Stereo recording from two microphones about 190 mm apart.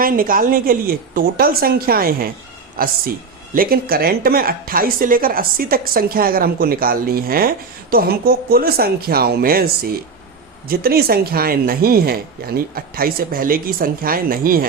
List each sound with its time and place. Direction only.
0.0 s a woman's voice: 50° right (ahead or behind)
3.5 s a woman's voice: 50° right (ahead or behind)